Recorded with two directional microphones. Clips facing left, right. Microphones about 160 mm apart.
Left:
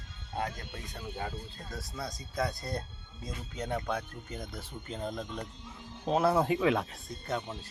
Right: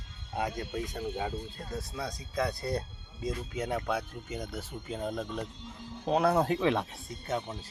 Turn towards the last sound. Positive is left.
turn(degrees=0)  # may be behind; listen again after turning